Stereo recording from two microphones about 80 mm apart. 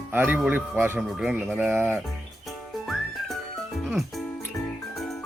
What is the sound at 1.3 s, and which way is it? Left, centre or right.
Speech, right.